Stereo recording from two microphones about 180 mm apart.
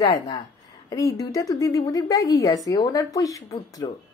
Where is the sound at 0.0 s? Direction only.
20° left (ahead or behind).